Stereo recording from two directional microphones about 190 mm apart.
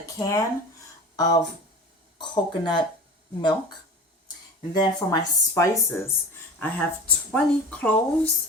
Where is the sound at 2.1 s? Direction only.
25° left (ahead or behind).